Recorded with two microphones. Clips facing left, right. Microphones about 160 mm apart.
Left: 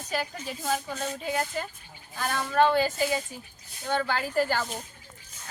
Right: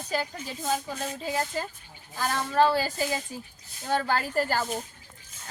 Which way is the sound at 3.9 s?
40° right (ahead or behind).